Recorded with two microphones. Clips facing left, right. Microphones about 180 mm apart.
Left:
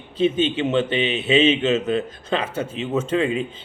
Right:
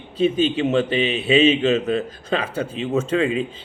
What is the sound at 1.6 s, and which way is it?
Speech, 30° right (ahead or behind).